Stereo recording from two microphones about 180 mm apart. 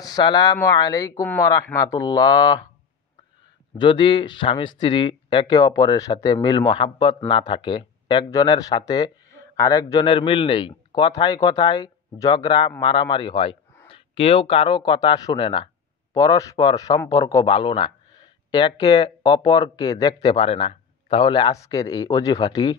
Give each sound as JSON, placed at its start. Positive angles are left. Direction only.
{"t": 0.0, "sound": "speech", "side_deg": 20}
{"t": 3.7, "sound": "speech", "side_deg": 25}